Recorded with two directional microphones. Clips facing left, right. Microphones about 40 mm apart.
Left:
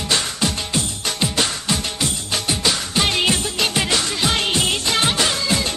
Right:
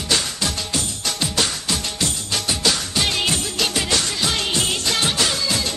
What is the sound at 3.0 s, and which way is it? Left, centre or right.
Music, left.